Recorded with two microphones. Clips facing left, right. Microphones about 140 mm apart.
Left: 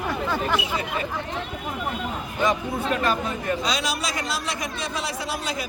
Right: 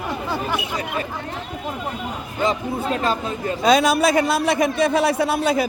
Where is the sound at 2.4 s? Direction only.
25° right (ahead or behind).